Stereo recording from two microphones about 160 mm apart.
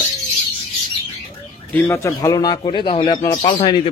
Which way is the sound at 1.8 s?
15° left (ahead or behind).